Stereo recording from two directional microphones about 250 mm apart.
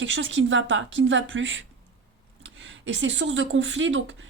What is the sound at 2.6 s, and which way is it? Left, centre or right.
A woman's voice, right.